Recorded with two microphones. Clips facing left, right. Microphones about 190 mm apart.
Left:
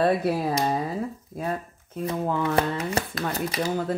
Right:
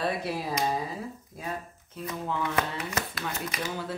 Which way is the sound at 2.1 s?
50° left (ahead or behind).